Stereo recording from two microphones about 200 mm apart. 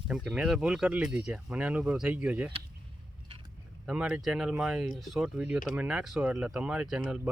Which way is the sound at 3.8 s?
5° right (ahead or behind).